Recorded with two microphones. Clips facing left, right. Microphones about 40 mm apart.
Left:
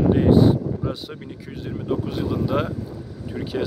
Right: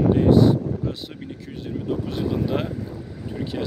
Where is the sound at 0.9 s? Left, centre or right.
Centre.